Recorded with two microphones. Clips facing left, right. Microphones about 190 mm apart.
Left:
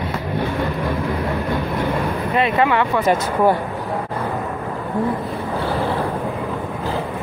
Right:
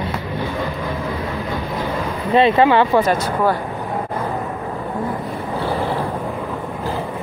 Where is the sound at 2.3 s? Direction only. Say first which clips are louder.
Right 5 dB; 30° right (ahead or behind).